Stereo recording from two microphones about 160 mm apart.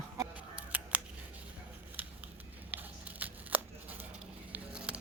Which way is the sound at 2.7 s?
10° right (ahead or behind).